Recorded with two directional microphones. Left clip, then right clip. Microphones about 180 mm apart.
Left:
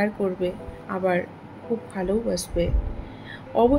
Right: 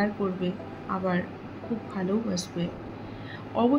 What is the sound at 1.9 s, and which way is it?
A woman's voice, 40° left (ahead or behind).